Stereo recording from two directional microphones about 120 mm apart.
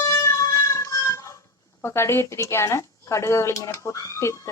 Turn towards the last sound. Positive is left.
turn(degrees=25)  # may be behind; listen again after turning